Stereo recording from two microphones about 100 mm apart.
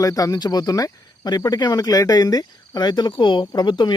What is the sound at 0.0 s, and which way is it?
Speech, 35° left (ahead or behind).